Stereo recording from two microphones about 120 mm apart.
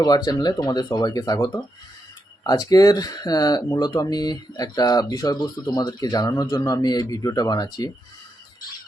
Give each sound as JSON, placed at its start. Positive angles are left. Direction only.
{"t": 0.0, "sound": "speech", "side_deg": 35}